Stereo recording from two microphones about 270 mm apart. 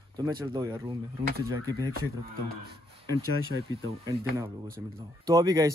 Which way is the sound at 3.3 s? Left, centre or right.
Right.